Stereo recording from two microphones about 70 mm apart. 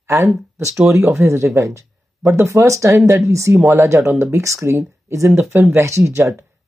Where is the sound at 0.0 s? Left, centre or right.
Right.